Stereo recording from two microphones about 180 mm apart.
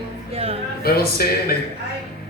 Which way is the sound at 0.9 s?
60° left (ahead or behind).